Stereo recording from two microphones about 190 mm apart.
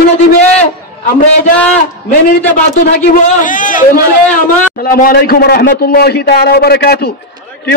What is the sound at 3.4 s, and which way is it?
A man's voice, 45° left (ahead or behind).